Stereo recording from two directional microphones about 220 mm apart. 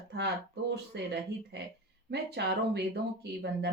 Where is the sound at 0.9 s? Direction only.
50° right (ahead or behind).